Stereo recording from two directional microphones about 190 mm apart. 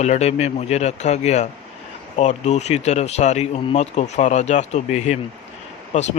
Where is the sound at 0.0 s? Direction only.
35° left (ahead or behind).